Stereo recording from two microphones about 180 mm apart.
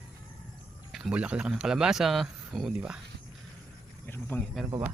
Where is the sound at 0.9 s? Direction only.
5° right (ahead or behind).